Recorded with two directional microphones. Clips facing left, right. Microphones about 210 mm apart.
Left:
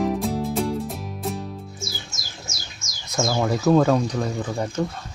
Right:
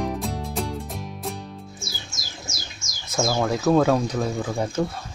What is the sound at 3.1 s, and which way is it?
Speech, centre (ahead or behind).